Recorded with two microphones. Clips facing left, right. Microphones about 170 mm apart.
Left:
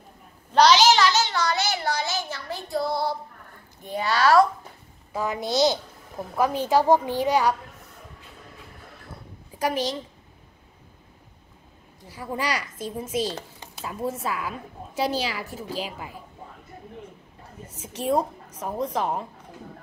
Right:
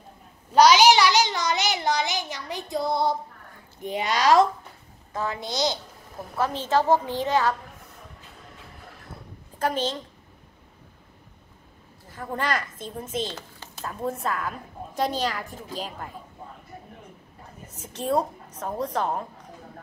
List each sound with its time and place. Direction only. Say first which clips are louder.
0.6 s a child's voice: right 1 dB; 10° right (ahead or behind)
5.1 s a woman's voice: left 2 dB; 15° left (ahead or behind)
5.4 s a woman's voice: left 8 dB; 20° right (ahead or behind)
6.3 s a woman's voice: left 2 dB; 10° left (ahead or behind)
9.6 s a woman's voice: even; 10° left (ahead or behind)
12.1 s a woman's voice: even; 10° left (ahead or behind)
17.6 s a woman's voice: left 2 dB; 10° left (ahead or behind)